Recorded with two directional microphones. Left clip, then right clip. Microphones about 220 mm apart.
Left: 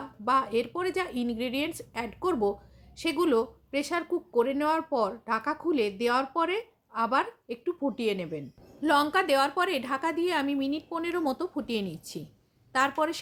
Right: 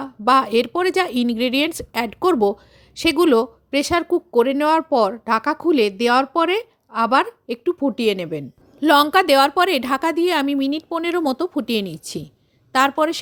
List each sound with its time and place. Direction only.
0.0 s a woman's voice: 45° right (ahead or behind)